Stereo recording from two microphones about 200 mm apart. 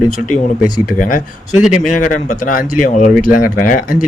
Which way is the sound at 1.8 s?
40° left (ahead or behind).